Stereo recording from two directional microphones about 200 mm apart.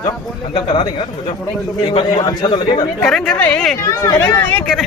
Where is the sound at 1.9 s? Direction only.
25° left (ahead or behind).